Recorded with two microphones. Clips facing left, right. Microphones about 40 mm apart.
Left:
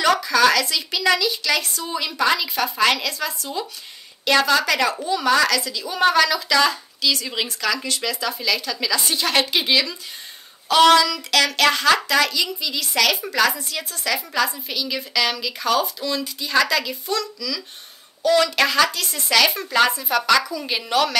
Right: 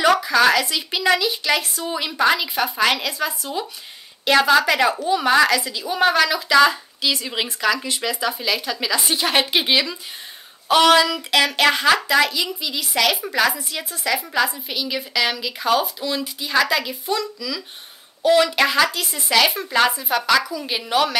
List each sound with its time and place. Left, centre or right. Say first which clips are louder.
0.0 s a woman's voice: right 1 dB; centre
11.0 s a woman's voice: right 1 dB; right